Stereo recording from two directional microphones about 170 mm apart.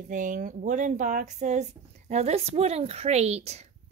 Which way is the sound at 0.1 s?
50° right (ahead or behind).